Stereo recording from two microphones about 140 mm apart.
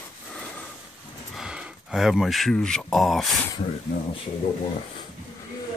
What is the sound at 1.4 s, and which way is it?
Speech, 5° right (ahead or behind).